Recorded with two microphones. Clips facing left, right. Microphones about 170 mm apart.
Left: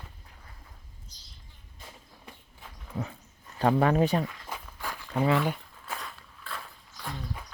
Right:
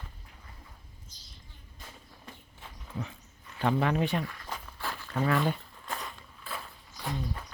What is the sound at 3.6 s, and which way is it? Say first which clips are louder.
Speech: left 4 dB; 40° left (ahead or behind).